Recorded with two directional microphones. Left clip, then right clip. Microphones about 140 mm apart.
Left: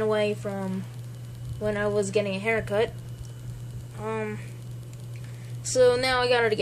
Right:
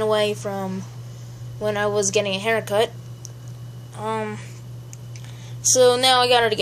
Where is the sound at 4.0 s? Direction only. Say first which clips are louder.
Right 5 dB; 15° right (ahead or behind).